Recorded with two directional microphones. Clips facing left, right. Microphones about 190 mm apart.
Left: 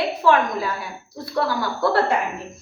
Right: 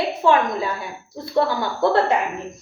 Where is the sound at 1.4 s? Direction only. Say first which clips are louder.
Right 3 dB; 25° right (ahead or behind).